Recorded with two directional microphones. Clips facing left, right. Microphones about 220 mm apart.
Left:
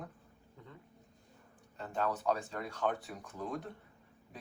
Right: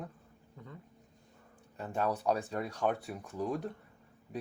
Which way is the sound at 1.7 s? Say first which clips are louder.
Right 2 dB; 10° right (ahead or behind).